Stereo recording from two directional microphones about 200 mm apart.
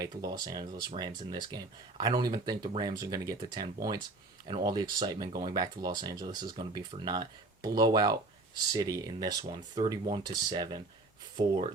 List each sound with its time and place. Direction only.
0.0 s speech: 20° right (ahead or behind)